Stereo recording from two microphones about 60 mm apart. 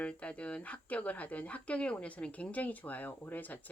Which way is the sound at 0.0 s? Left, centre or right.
Left.